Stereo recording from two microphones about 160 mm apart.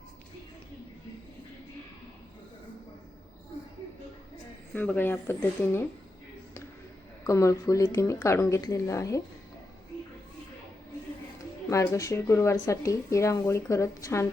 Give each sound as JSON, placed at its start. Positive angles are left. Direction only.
{"t": 4.7, "sound": "speech", "side_deg": 10}
{"t": 7.3, "sound": "speech", "side_deg": 20}
{"t": 11.7, "sound": "speech", "side_deg": 20}